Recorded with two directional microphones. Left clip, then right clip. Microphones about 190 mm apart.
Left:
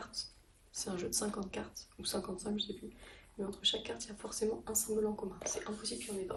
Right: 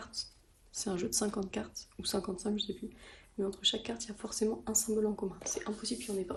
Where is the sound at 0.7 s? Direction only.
40° right (ahead or behind).